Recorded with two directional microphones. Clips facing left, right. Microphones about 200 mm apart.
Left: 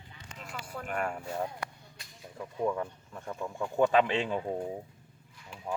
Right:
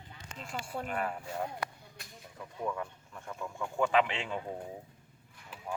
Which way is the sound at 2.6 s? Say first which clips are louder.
Left 4 dB; 35° left (ahead or behind).